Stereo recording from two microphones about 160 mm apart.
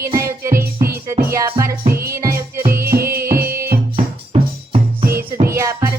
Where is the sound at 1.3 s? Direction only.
20° right (ahead or behind).